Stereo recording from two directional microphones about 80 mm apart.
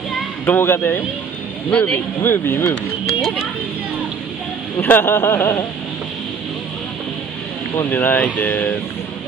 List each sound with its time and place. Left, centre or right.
0.5 s speech: left
1.7 s speech: centre
2.2 s speech: left
3.1 s speech: centre
4.7 s speech: left
7.9 s speech: left